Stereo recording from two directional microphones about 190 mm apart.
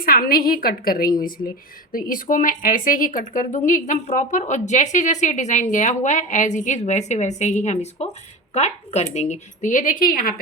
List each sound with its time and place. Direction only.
0.0 s a woman's voice: 50° left (ahead or behind)